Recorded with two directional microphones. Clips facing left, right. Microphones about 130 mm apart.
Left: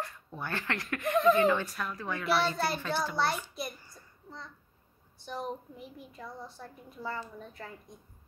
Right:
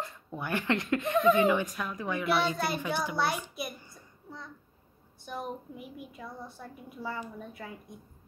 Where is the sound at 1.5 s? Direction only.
15° right (ahead or behind).